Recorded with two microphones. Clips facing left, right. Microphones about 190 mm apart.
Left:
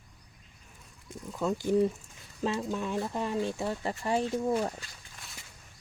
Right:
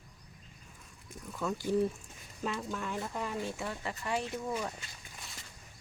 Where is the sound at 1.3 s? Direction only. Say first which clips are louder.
Left 4 dB; 20° left (ahead or behind); by 4.7 s 35° left (ahead or behind).